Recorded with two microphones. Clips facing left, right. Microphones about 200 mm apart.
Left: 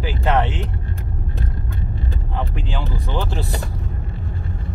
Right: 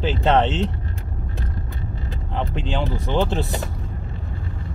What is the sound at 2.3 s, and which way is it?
Vehicle, 20° right (ahead or behind).